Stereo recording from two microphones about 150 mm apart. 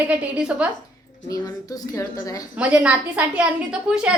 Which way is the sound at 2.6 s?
10° right (ahead or behind).